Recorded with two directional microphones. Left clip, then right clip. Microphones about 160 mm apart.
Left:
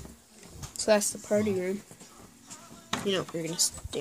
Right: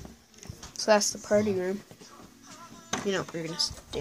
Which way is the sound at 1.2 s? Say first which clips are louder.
Right 2 dB; 5° left (ahead or behind).